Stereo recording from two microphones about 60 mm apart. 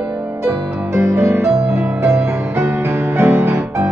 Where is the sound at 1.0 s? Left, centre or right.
Right.